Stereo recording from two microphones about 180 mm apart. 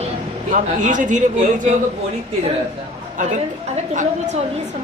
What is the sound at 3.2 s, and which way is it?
A woman's voice, 45° right (ahead or behind).